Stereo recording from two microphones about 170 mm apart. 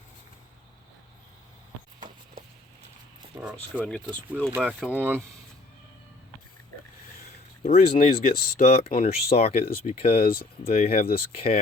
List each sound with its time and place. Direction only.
3.3 s speech: 10° right (ahead or behind)
3.8 s speech: 5° left (ahead or behind)
7.6 s speech: 35° left (ahead or behind)
8.1 s speech: 60° left (ahead or behind)
9.0 s speech: 35° left (ahead or behind)